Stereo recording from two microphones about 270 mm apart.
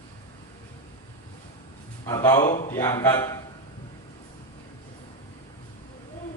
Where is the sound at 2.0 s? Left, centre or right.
Centre.